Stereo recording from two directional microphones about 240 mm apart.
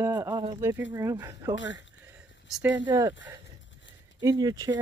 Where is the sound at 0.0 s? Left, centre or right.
Centre.